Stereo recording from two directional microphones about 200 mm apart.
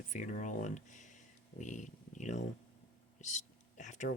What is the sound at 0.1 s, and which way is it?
Speech, 40° left (ahead or behind).